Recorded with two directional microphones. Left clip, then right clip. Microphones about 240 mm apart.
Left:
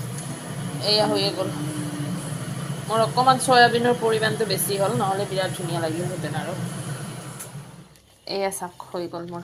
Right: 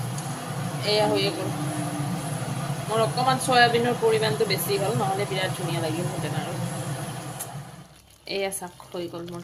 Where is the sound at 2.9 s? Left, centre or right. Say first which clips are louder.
Left 4 dB; centre.